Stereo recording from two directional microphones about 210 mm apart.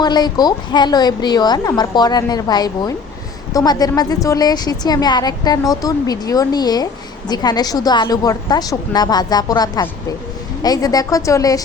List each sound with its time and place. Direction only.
0.0 s a woman's voice: 20° left (ahead or behind)